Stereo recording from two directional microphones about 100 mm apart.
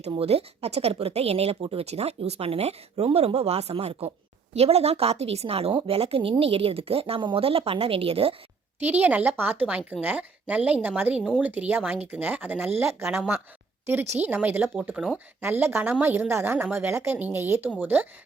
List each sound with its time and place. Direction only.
0.2 s speech: 90° right
5.7 s a woman's voice: 65° right (ahead or behind)
7.2 s a woman's voice: 60° right (ahead or behind)
8.8 s speech: 15° right (ahead or behind)
14.2 s speech: 15° right (ahead or behind)
15.4 s a woman's voice: 20° right (ahead or behind)